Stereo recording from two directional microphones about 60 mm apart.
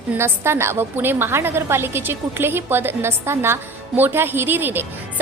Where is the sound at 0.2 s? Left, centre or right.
Right.